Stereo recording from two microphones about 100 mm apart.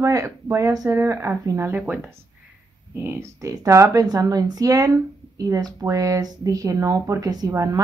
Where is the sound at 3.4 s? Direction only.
35° right (ahead or behind).